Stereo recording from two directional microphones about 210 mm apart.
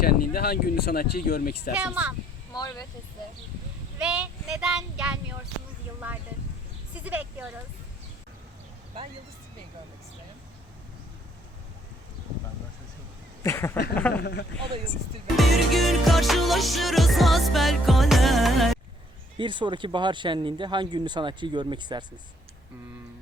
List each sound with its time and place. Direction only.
0.0 s speech: 45° left (ahead or behind)
1.8 s speech: 5° right (ahead or behind)
2.5 s speech: 20° left (ahead or behind)
3.9 s child singing: 5° right (ahead or behind)
6.9 s speech: 5° right (ahead or behind)
13.4 s a sound: 10° left (ahead or behind)
14.1 s speech: 50° left (ahead or behind)
15.4 s music: centre (ahead or behind)
19.4 s speech: 25° right (ahead or behind)